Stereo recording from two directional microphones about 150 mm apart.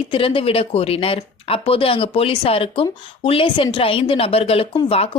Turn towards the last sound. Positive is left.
turn(degrees=40)  # may be behind; listen again after turning